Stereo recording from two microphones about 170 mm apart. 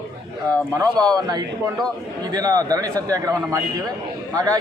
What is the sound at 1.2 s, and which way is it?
A man's voice, 25° right (ahead or behind).